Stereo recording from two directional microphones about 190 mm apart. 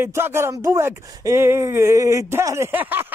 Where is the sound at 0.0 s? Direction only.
10° right (ahead or behind).